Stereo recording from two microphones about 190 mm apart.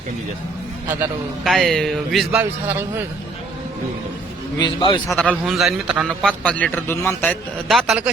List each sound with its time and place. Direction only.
1.5 s a man's voice: centre (ahead or behind)
4.6 s a man's voice: 25° left (ahead or behind)
5.0 s a man's voice: 5° left (ahead or behind)
7.7 s a man's voice: centre (ahead or behind)